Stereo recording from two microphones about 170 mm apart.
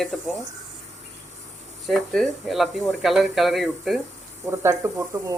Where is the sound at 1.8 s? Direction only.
Centre (ahead or behind).